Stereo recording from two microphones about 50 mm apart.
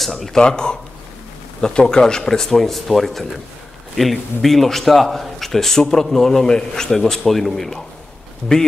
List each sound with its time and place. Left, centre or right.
0.0 s a man's voice: centre
8.5 s speech: centre